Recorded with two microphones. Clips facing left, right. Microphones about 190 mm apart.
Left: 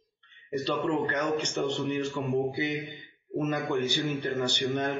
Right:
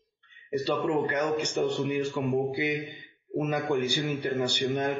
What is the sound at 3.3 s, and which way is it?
Speech, 10° right (ahead or behind).